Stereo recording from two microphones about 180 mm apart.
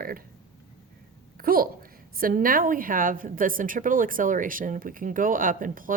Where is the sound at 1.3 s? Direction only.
55° right (ahead or behind).